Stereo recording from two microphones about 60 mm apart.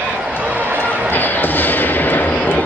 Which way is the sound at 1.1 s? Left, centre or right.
Left.